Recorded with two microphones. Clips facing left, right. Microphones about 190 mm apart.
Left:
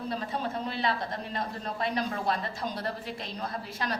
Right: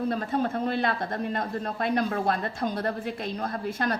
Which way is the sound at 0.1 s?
50° right (ahead or behind).